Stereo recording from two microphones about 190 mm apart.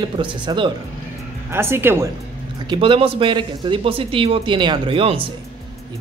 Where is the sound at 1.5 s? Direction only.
10° right (ahead or behind).